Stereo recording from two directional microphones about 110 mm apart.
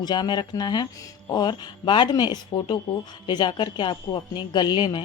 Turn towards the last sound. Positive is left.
turn(degrees=40)  # may be behind; listen again after turning